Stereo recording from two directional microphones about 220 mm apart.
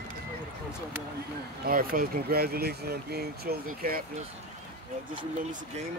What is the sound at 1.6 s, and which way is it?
Speech, 40° right (ahead or behind).